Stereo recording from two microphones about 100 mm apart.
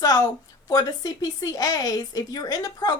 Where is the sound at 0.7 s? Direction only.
40° left (ahead or behind).